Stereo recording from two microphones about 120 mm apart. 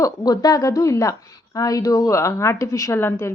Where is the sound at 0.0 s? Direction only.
30° left (ahead or behind).